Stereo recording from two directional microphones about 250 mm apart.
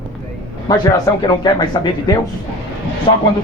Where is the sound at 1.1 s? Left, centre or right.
Centre.